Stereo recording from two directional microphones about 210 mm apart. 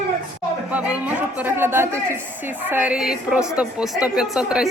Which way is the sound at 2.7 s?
5° right (ahead or behind).